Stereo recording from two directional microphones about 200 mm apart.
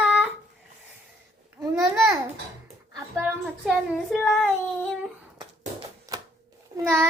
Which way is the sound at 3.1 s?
Centre (ahead or behind).